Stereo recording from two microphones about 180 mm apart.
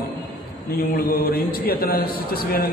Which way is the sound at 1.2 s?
55° left (ahead or behind).